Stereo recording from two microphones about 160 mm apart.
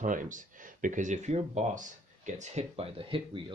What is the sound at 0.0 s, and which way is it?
Speech, 55° right (ahead or behind).